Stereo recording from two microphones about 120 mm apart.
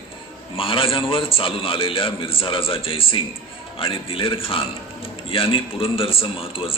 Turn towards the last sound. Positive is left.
turn(degrees=50)  # may be behind; listen again after turning